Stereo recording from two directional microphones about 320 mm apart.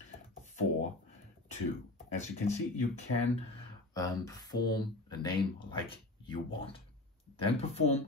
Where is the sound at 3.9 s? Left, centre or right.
Centre.